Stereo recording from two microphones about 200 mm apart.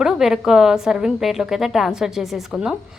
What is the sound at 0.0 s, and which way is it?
A woman's voice, centre (ahead or behind).